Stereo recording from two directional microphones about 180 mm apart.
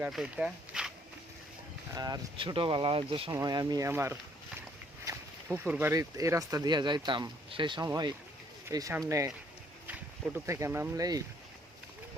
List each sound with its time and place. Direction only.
0.0 s speech: centre (ahead or behind)
1.9 s speech: 20° right (ahead or behind)
10.3 s speech: 15° right (ahead or behind)